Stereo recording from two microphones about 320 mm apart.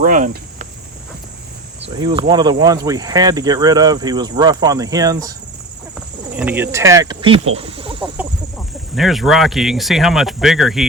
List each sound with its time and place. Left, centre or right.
0.0 s cricket: right
1.8 s speech: centre
8.1 s speech: centre